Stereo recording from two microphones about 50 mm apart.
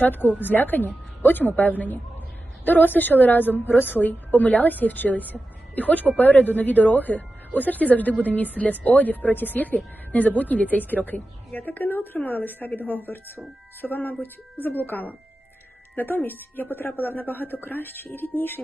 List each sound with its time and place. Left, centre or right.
0.0 s speech: left